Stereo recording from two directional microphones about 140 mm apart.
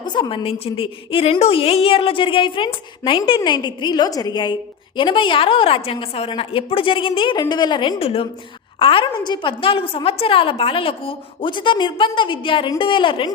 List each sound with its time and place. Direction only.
0.0 s a woman's voice: 35° left (ahead or behind)